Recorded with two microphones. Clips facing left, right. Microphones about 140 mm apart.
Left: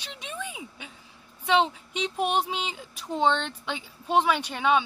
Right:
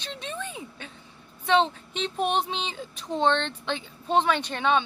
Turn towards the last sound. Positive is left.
turn(degrees=10)  # may be behind; listen again after turning